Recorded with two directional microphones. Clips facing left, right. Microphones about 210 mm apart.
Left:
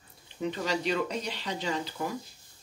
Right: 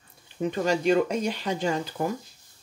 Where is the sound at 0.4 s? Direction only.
45° right (ahead or behind).